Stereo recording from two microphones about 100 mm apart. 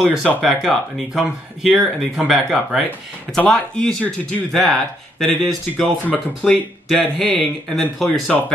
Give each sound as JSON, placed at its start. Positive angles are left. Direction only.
{"t": 0.0, "sound": "speech", "side_deg": 0}
{"t": 6.0, "sound": "speech", "side_deg": -5}